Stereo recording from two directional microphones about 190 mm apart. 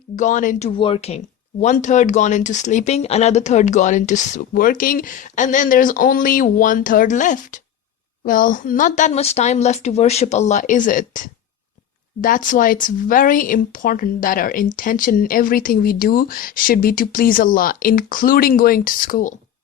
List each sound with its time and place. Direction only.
0.2 s speech: 40° left (ahead or behind)
0.8 s speech: 30° left (ahead or behind); by 19.3 s 45° left (ahead or behind)